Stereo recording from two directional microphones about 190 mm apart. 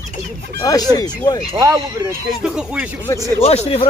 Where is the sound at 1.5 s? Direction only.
15° right (ahead or behind).